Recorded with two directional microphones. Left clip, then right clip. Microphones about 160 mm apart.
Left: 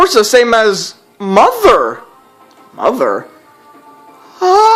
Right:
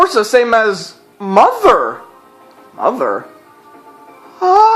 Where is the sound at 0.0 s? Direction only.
35° left (ahead or behind).